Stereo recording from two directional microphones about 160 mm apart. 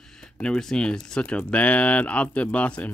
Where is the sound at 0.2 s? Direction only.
5° left (ahead or behind).